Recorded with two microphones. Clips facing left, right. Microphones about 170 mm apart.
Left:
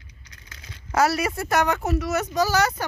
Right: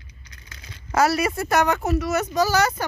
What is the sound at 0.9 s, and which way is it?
Speech, 90° right.